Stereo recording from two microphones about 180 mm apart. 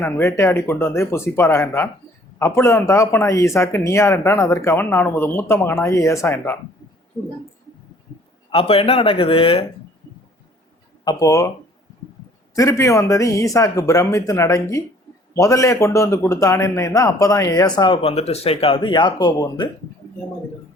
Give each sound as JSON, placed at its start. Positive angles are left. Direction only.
{"t": 0.0, "sound": "speech", "side_deg": 15}
{"t": 8.4, "sound": "speech", "side_deg": 30}
{"t": 11.0, "sound": "a man's voice", "side_deg": 20}
{"t": 12.5, "sound": "a man's voice", "side_deg": 15}